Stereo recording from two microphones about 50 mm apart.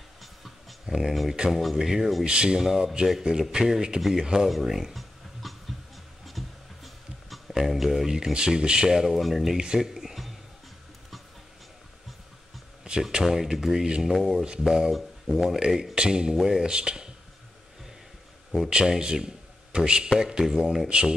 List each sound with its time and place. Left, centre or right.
0.2 s dog: centre
0.8 s speech: centre
1.6 s speech: centre
2.2 s speech: centre
2.6 s speech: centre
4.5 s a sound: centre
13.0 s speech: centre
14.4 s speech: centre
16.3 s speech: centre
16.6 s speech: centre
18.7 s a man's voice: centre